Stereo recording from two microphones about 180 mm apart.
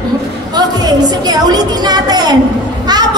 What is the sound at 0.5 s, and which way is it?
A woman's voice, 20° right (ahead or behind).